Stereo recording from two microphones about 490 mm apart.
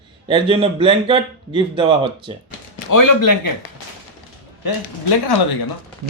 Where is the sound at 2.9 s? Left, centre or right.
Left.